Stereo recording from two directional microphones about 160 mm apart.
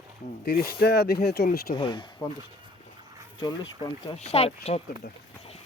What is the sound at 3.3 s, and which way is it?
Speech, 25° left (ahead or behind).